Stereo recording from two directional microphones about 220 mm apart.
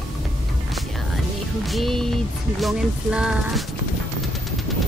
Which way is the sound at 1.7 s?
Centre (ahead or behind).